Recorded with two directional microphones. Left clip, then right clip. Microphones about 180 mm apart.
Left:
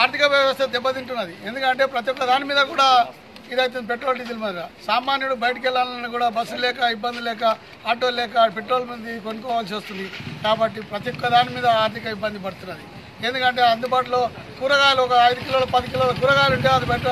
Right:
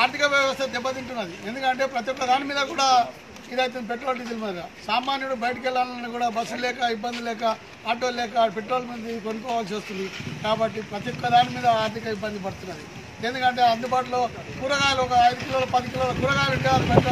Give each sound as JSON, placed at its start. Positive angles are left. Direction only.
{"t": 0.0, "sound": "speech", "side_deg": 5}